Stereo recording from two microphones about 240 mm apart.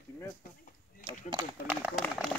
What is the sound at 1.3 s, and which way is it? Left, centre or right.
Speech, centre.